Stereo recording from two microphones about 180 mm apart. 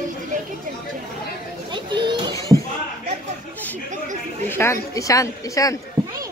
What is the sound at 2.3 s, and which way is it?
Speech, 20° left (ahead or behind).